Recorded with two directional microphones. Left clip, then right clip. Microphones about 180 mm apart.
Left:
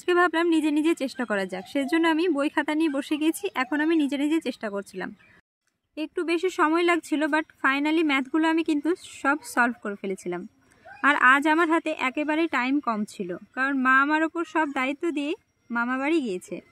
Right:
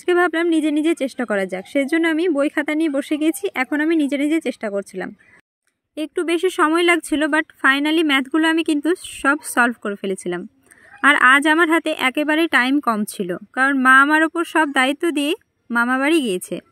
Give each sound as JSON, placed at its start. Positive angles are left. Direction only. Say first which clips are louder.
{"t": 0.0, "sound": "speech", "louder": "right 4 dB", "side_deg": -20}